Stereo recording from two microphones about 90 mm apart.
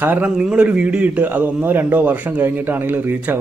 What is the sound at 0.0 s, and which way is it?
A man's voice, 15° right (ahead or behind).